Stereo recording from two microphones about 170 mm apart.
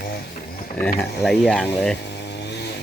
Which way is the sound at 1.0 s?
Centre (ahead or behind).